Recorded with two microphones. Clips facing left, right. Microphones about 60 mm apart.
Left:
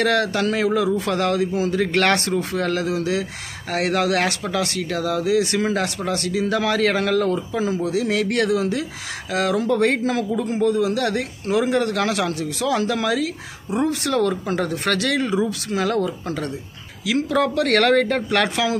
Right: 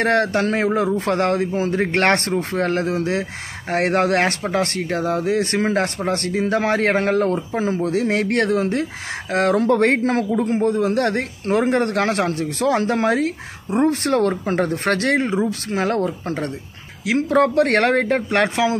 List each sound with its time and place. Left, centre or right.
0.0 s a man's voice: right